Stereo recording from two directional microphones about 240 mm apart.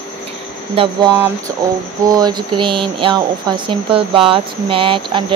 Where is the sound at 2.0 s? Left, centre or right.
Centre.